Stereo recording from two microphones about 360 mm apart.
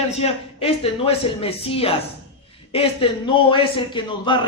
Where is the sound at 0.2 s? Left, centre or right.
Centre.